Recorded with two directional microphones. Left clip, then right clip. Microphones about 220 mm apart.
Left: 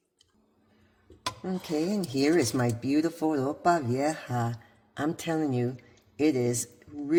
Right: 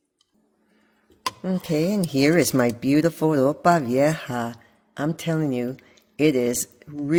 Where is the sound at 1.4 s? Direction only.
30° right (ahead or behind).